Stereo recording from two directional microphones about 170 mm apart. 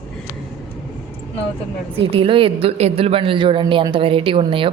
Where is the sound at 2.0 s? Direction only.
35° right (ahead or behind).